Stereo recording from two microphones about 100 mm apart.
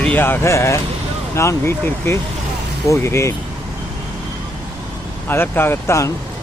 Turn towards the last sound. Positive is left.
turn(degrees=30)  # may be behind; listen again after turning